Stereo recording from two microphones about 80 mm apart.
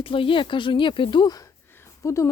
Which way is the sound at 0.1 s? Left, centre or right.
Left.